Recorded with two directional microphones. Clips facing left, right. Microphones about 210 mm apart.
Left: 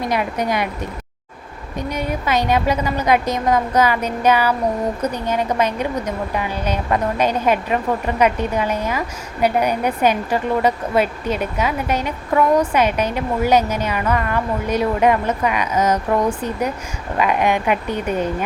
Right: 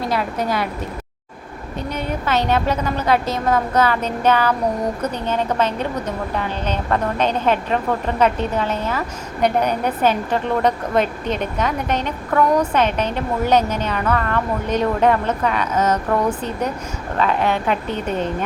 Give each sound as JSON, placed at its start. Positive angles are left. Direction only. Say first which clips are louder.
{"t": 0.0, "sound": "a woman's voice", "louder": "left 1 dB", "side_deg": 15}
{"t": 1.9, "sound": "a woman's voice", "louder": "left 1 dB", "side_deg": 10}